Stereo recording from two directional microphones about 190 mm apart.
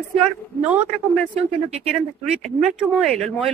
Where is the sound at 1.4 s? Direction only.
35° right (ahead or behind).